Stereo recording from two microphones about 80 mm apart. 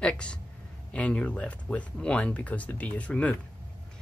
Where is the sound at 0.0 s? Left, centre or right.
Centre.